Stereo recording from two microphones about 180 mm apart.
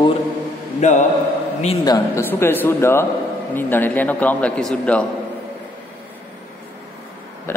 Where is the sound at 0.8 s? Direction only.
40° left (ahead or behind).